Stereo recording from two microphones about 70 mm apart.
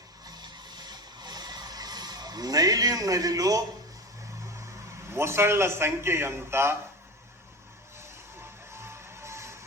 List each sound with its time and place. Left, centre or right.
0.3 s a sound: right
5.1 s a man's voice: right
8.7 s music: right